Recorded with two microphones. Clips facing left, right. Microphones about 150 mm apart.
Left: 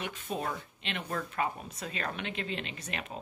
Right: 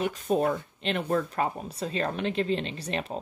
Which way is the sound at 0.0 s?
40° right (ahead or behind).